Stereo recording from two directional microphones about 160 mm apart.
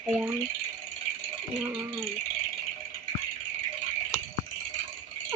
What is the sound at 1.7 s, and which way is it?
Speech, 15° right (ahead or behind).